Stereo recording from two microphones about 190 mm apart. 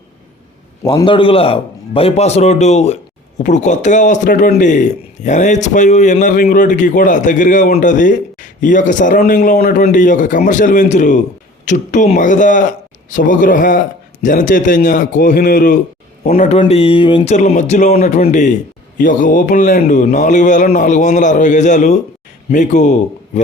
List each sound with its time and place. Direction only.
0.9 s a man's voice: 25° left (ahead or behind)